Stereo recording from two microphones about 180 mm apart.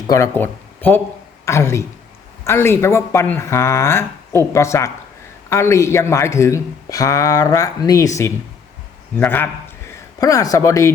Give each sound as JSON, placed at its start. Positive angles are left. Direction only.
{"t": 0.1, "sound": "speech", "side_deg": 15}